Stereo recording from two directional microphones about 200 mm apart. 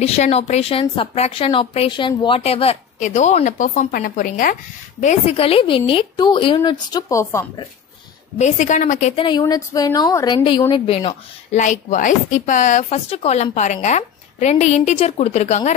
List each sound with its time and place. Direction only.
0.0 s a woman's voice: 30° left (ahead or behind)
5.0 s a woman's voice: 30° left (ahead or behind); by 7.6 s 15° left (ahead or behind)
8.4 s a woman's voice: 35° left (ahead or behind)